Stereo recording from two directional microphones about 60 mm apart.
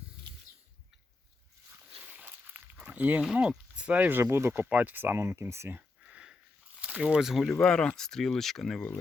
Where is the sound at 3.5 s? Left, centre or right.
Centre; by 4.6 s right.